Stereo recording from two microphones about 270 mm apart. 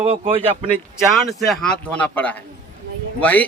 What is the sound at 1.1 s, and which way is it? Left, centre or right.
A man's voice, centre.